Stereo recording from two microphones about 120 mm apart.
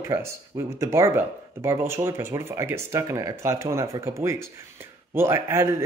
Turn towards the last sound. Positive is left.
turn(degrees=-20)  # may be behind; listen again after turning